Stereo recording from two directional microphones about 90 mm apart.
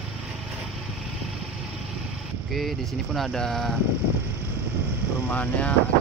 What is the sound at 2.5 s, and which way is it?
Speech, centre (ahead or behind).